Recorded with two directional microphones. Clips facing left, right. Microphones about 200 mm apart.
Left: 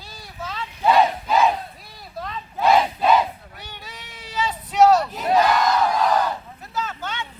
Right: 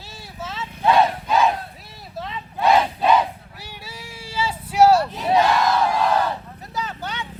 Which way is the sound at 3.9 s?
30° right (ahead or behind).